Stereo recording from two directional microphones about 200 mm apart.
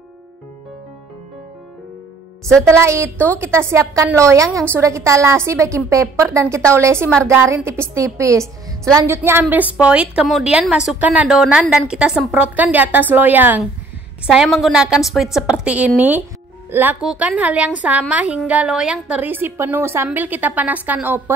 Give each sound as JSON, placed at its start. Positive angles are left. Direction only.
{"t": 2.8, "sound": "a woman's voice", "side_deg": -15}